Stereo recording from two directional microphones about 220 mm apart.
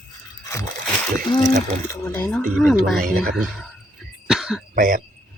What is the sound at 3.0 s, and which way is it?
Speech, 40° right (ahead or behind).